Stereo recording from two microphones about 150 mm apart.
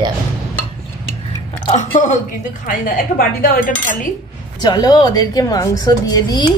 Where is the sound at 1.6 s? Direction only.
50° left (ahead or behind).